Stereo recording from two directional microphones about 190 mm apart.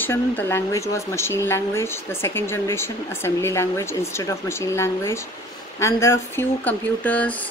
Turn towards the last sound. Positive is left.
turn(degrees=10)  # may be behind; listen again after turning